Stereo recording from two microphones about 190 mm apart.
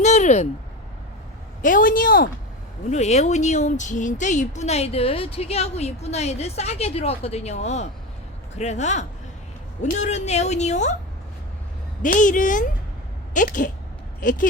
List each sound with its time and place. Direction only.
0.0 s a sound: 40° left (ahead or behind)
1.6 s speech: 45° left (ahead or behind)
2.9 s speech: 35° left (ahead or behind)
12.0 s speech: 40° left (ahead or behind)